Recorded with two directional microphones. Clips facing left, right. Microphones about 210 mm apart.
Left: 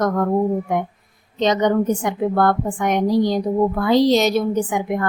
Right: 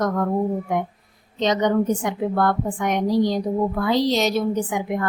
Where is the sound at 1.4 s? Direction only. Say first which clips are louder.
Left 2 dB; 50° left (ahead or behind).